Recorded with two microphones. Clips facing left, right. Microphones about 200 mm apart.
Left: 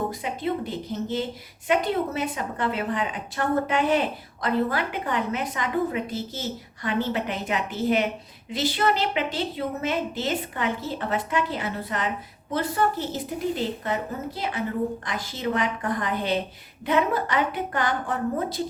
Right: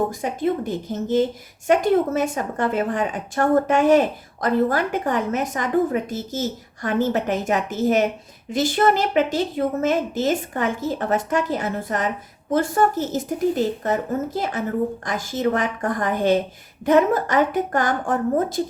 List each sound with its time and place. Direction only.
0.1 s speech: 45° right (ahead or behind)